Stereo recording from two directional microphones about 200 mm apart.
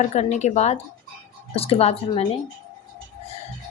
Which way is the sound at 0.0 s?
35° left (ahead or behind).